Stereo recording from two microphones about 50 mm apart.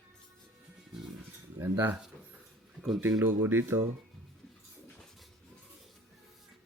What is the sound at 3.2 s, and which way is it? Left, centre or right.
Speech, right.